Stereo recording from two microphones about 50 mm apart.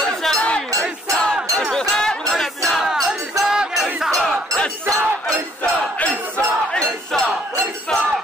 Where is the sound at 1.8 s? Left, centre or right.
Centre.